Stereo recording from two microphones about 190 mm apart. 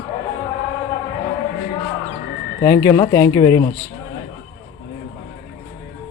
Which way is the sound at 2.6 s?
15° left (ahead or behind).